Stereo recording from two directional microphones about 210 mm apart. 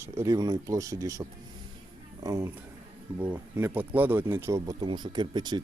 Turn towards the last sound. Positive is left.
turn(degrees=-20)  # may be behind; listen again after turning